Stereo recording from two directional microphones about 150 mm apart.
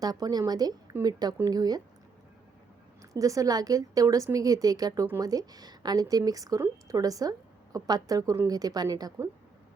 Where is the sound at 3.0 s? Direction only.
20° right (ahead or behind).